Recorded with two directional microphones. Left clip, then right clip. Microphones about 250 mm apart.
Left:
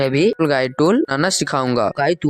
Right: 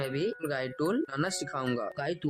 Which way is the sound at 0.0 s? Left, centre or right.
Left.